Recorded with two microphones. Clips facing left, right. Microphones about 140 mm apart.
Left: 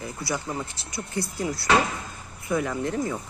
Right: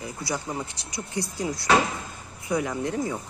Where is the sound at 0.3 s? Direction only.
20° right (ahead or behind).